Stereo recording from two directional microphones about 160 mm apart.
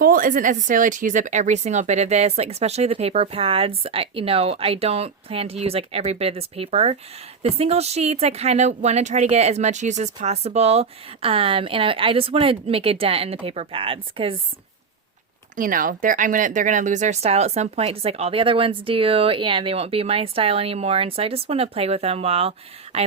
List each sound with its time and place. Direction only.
0.0 s speech: 60° right (ahead or behind); by 14.3 s 35° right (ahead or behind)
15.5 s speech: 60° right (ahead or behind); by 23.0 s 40° right (ahead or behind)